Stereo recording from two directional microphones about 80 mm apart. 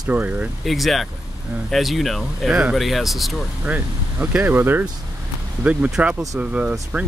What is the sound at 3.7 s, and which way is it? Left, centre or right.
Speech, right.